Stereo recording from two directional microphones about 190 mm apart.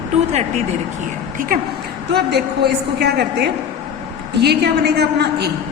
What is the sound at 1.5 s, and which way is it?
A woman's voice, 50° right (ahead or behind).